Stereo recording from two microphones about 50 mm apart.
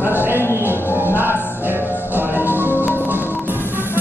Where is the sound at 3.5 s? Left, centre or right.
Right.